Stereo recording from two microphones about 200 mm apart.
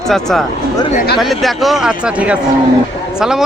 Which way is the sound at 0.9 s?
50° left (ahead or behind).